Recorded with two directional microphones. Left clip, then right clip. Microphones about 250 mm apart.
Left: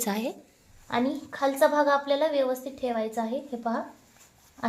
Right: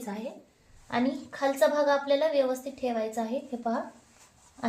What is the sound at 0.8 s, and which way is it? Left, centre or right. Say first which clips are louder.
A woman's voice: left 2 dB; left.